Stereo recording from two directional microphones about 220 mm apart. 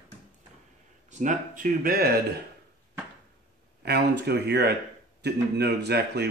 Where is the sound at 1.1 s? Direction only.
35° right (ahead or behind).